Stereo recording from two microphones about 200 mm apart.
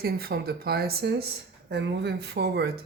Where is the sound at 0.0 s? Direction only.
50° right (ahead or behind).